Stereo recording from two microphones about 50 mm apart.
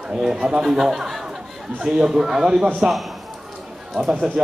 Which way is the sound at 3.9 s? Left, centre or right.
Centre.